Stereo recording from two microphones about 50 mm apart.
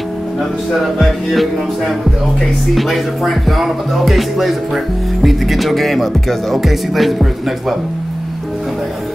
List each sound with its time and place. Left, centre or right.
0.9 s music: centre